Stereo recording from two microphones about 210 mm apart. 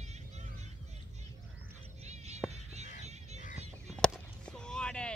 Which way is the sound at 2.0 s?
30° right (ahead or behind).